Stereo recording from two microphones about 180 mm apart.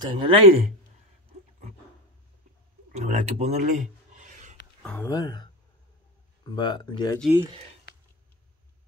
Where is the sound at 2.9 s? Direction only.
40° right (ahead or behind).